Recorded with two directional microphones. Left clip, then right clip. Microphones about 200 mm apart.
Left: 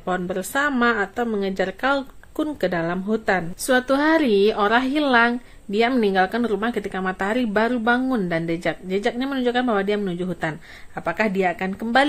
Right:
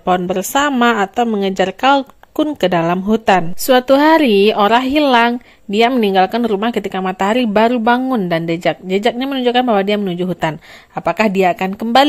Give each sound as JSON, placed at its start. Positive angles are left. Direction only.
{"t": 0.0, "sound": "a woman's voice", "side_deg": -30}